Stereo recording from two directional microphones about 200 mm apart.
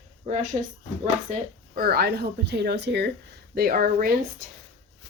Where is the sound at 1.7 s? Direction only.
50° right (ahead or behind).